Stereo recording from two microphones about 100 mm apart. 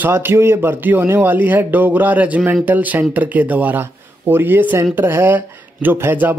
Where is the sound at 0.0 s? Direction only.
20° right (ahead or behind).